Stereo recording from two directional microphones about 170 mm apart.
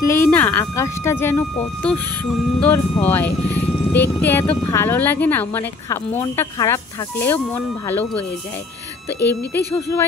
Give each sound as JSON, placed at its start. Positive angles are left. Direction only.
{"t": 0.0, "sound": "speech", "side_deg": 15}
{"t": 9.8, "sound": "speech", "side_deg": 15}